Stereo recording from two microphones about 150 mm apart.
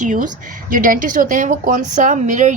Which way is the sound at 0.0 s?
60° right (ahead or behind).